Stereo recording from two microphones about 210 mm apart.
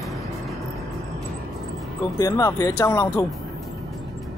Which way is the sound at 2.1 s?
15° left (ahead or behind).